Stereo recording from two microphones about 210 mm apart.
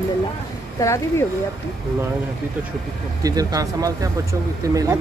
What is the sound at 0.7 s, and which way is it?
Speech, 15° left (ahead or behind).